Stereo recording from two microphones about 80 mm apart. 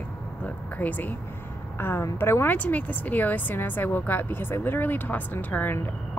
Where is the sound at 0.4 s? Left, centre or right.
Centre.